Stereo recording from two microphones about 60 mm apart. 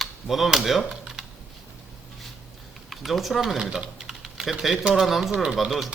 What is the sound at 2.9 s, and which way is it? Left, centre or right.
Speech, centre.